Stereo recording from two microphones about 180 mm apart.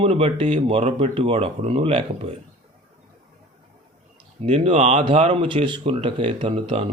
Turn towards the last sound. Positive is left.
turn(degrees=-30)  # may be behind; listen again after turning